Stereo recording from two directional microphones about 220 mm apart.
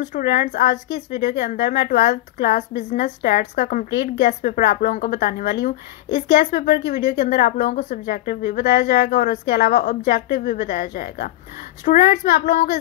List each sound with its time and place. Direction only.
0.1 s a woman's voice: 45° left (ahead or behind)